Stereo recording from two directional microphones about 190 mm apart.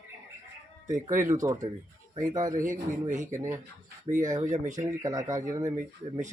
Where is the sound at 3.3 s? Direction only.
15° right (ahead or behind).